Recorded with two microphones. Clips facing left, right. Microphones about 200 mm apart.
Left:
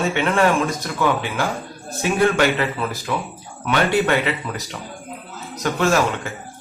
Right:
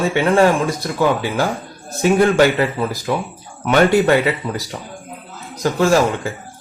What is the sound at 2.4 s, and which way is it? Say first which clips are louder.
A man's voice: right 5 dB; 35° right (ahead or behind).